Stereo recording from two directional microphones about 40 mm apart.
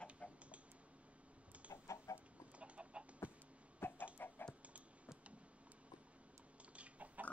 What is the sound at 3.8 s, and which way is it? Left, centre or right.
Chicken, left.